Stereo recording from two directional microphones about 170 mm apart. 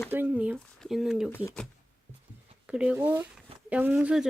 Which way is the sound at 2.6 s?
5° right (ahead or behind).